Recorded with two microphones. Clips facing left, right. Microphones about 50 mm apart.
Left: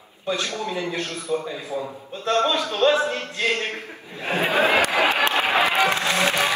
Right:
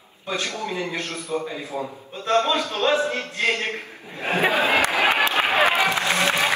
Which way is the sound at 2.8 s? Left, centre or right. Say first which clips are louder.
Left 3 dB; centre.